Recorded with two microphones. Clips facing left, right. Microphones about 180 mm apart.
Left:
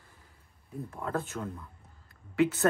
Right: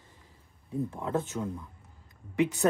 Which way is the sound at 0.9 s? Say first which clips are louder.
Left 2 dB; 20° right (ahead or behind).